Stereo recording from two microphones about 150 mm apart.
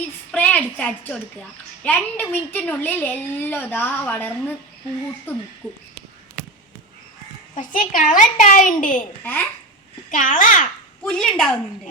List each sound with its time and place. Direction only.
0.3 s a child's voice: 10° left (ahead or behind)
5.6 s a child's voice: 10° left (ahead or behind)
7.5 s a child's voice: 60° left (ahead or behind)
9.2 s a child's voice: 10° left (ahead or behind)
10.1 s a child's voice: 60° left (ahead or behind)
11.0 s a woman's voice: 5° left (ahead or behind)